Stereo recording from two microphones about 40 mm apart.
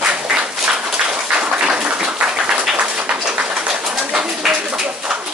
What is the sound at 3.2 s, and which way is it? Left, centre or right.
Bird, right.